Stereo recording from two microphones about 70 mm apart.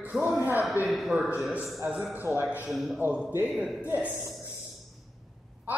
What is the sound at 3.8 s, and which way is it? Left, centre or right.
Speech, right.